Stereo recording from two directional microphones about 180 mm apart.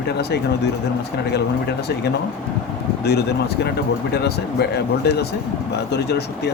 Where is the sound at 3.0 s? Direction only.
65° left (ahead or behind).